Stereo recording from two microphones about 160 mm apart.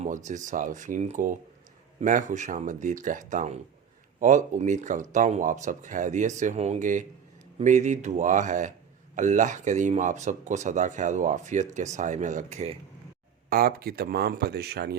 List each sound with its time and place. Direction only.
0.0 s speech: 50° right (ahead or behind)
13.5 s speech: 70° right (ahead or behind); by 14.9 s 90° right